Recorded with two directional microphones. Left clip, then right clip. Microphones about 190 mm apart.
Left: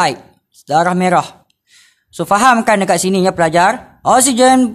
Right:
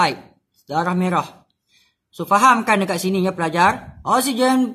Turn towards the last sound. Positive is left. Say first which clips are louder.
# left 8 dB
turn(degrees=50)  # may be behind; listen again after turning